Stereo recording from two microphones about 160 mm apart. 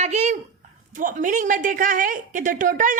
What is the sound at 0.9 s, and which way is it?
A woman's voice, 55° right (ahead or behind).